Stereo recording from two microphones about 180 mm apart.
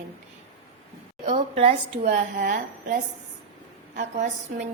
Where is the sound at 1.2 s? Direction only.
35° right (ahead or behind).